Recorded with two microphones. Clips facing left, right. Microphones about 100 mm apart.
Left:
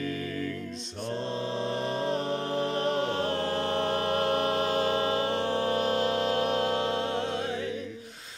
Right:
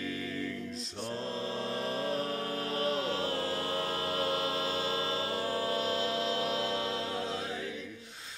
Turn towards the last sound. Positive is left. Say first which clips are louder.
# left 6 dB
turn(degrees=65)  # may be behind; listen again after turning